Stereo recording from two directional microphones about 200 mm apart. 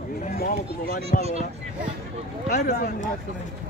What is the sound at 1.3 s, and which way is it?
Speech, 30° right (ahead or behind).